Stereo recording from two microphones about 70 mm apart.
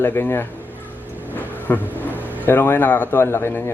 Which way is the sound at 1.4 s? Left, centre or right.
Left.